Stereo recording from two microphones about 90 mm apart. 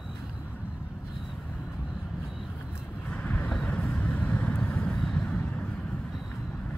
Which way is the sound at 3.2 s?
15° left (ahead or behind).